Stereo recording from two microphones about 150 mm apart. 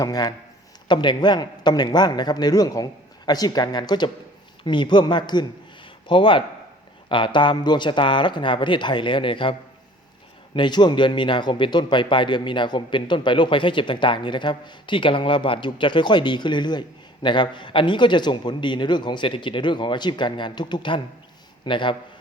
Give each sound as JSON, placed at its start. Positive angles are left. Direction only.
{"t": 0.0, "sound": "a man's voice", "side_deg": 25}